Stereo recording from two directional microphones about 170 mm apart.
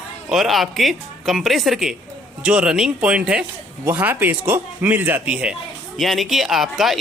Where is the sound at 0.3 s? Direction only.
Centre (ahead or behind).